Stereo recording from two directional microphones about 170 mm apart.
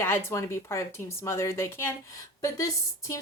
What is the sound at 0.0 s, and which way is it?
A woman's voice, 15° left (ahead or behind).